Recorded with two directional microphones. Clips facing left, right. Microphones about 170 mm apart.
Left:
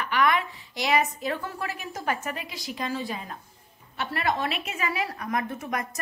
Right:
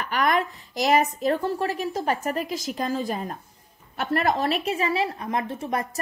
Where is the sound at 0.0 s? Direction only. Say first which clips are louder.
Right 1 dB; 40° right (ahead or behind).